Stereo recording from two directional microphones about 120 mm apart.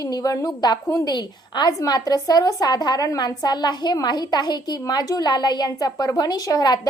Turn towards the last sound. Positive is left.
turn(degrees=35)  # may be behind; listen again after turning